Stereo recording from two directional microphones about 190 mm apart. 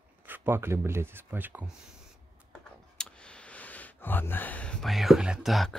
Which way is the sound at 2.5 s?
5° left (ahead or behind).